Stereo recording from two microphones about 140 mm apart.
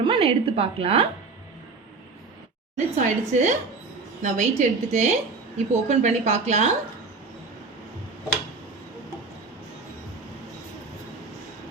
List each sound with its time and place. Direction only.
0.1 s a woman's voice: 45° right (ahead or behind)
2.7 s a woman's voice: 60° right (ahead or behind)